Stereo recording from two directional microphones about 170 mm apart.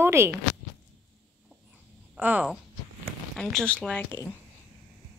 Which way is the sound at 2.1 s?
10° right (ahead or behind).